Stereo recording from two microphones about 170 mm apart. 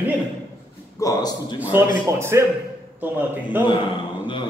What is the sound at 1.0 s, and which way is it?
Speech, 20° left (ahead or behind).